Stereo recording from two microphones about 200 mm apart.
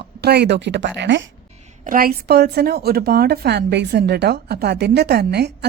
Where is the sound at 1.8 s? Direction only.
45° right (ahead or behind).